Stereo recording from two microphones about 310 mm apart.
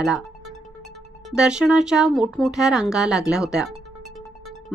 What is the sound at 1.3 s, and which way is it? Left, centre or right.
A woman's voice, centre.